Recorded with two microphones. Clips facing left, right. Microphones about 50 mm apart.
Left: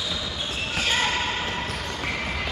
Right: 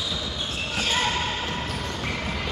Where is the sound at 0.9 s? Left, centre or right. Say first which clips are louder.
Left 1 dB; centre.